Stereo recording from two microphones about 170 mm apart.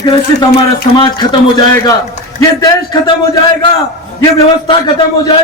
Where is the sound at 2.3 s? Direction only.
20° left (ahead or behind).